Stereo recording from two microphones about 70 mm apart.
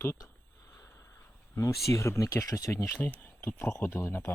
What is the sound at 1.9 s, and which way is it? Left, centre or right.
Speech, left.